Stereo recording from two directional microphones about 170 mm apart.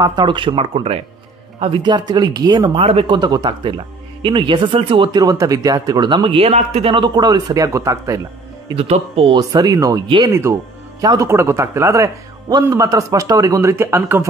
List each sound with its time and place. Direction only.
0.0 s speech: 25° right (ahead or behind)
8.6 s speech: 35° right (ahead or behind)
9.4 s speech: 20° right (ahead or behind)